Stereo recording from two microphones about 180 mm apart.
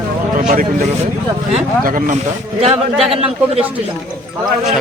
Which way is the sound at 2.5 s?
35° right (ahead or behind).